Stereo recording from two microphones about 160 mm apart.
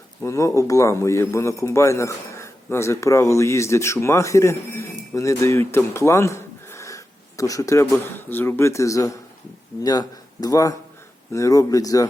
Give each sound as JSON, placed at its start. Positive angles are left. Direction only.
{"t": 0.2, "sound": "a man's voice", "side_deg": 15}